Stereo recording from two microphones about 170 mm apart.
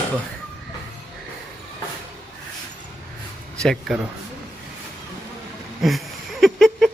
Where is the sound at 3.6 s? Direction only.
Centre (ahead or behind).